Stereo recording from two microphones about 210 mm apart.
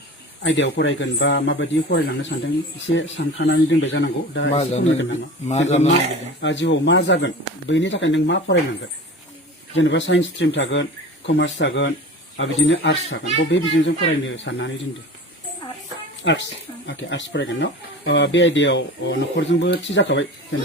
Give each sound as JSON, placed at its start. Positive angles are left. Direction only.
{"t": 0.4, "sound": "speech", "side_deg": 60}
{"t": 4.5, "sound": "a man's voice", "side_deg": 30}
{"t": 6.4, "sound": "speech", "side_deg": 60}
{"t": 9.7, "sound": "speech", "side_deg": 60}
{"t": 16.2, "sound": "speech", "side_deg": 60}